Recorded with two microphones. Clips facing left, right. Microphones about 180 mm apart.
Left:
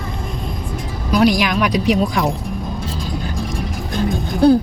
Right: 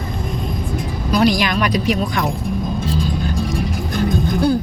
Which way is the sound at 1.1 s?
10° left (ahead or behind).